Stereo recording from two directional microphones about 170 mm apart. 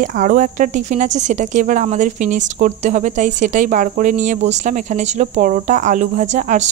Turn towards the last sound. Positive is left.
turn(degrees=-45)  # may be behind; listen again after turning